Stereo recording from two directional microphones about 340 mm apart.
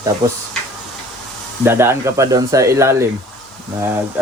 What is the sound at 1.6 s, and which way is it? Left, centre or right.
Speech, centre.